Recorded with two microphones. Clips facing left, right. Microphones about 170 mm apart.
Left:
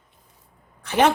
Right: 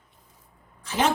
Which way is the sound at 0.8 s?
60° left (ahead or behind).